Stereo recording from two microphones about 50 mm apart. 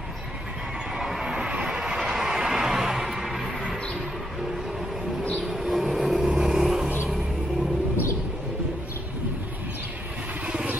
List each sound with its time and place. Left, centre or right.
0.9 s neigh: centre
1.3 s a sound: centre
5.4 s vehicle: centre
10.4 s vehicle: right